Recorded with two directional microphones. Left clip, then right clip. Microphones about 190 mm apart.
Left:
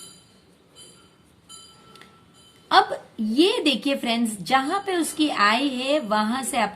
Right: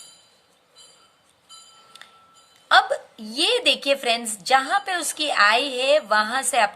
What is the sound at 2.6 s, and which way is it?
A woman's voice, 35° right (ahead or behind).